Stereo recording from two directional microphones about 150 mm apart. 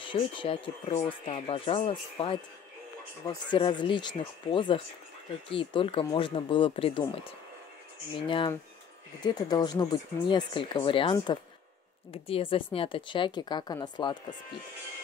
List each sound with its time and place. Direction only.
0.0 s speech: 35° left (ahead or behind)
3.4 s speech: 35° left (ahead or behind)
9.2 s speech: 30° left (ahead or behind)